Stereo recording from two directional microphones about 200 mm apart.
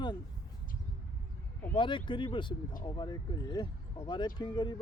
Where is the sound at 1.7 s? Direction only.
25° left (ahead or behind).